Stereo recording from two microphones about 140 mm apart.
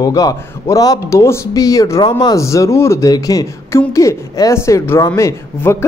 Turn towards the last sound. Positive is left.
turn(degrees=20)  # may be behind; listen again after turning